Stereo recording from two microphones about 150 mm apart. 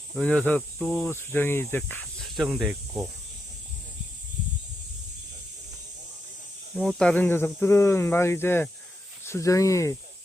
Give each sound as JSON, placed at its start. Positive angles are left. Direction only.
{"t": 0.2, "sound": "speech", "side_deg": 5}
{"t": 1.1, "sound": "speech", "side_deg": 15}
{"t": 2.2, "sound": "snake", "side_deg": 0}
{"t": 6.7, "sound": "speech", "side_deg": 5}